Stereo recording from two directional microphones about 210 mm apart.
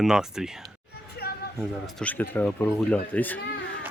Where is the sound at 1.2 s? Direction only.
50° left (ahead or behind).